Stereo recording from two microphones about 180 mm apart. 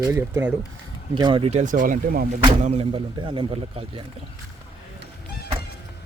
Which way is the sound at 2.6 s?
35° right (ahead or behind).